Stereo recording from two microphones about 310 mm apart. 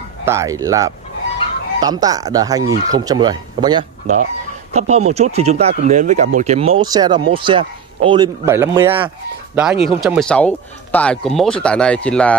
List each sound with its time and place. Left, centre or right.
0.2 s speech: centre
9.6 s speech: centre